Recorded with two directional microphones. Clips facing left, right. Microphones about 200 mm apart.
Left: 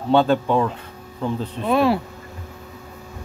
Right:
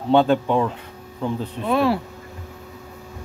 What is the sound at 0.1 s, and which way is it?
Speech, 20° right (ahead or behind).